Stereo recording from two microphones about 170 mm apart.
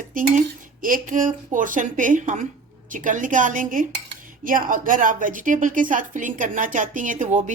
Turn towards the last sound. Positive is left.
turn(degrees=-45)  # may be behind; listen again after turning